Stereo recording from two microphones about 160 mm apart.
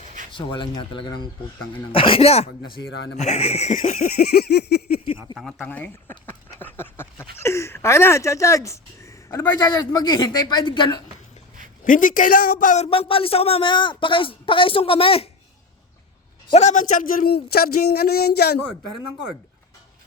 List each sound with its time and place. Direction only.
0.3 s a man's voice: 30° left (ahead or behind)
2.6 s a man's voice: 90° left
3.2 s a sound: 40° left (ahead or behind)
3.9 s speech: 70° left (ahead or behind); by 4.9 s 90° left
5.4 s a sound: centre (ahead or behind)
7.3 s speech: 15° left (ahead or behind)
11.9 s a man's voice: 55° left (ahead or behind); by 15.3 s 35° left (ahead or behind)
16.5 s speech: 45° left (ahead or behind); by 18.5 s 80° left